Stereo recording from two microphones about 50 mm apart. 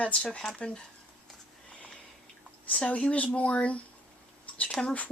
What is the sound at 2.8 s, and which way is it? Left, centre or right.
Speech, left.